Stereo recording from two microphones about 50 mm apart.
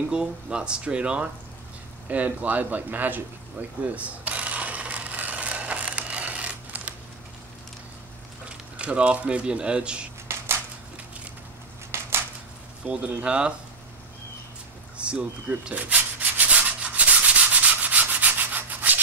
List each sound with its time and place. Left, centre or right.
0.1 s speech: centre
2.0 s speech: right
3.9 s a sound: right
8.7 s speech: right
10.3 s a sound: right
11.9 s a sound: right
12.8 s speech: right
15.0 s speech: right
15.7 s rub: right